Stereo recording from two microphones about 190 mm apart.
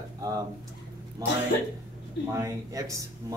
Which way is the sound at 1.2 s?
20° right (ahead or behind).